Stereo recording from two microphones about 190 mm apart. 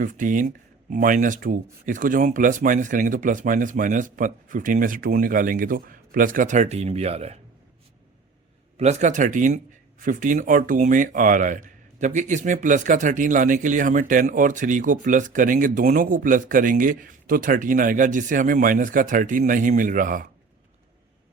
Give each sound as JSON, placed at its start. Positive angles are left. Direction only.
{"t": 0.0, "sound": "speech", "side_deg": -45}
{"t": 8.8, "sound": "speech", "side_deg": -40}